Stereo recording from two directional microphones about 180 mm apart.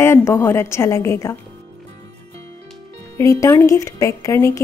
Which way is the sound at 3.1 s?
15° left (ahead or behind).